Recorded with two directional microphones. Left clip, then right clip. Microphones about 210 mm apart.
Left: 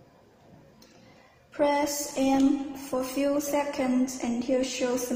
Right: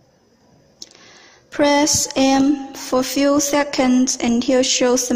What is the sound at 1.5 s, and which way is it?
Speech, 50° right (ahead or behind).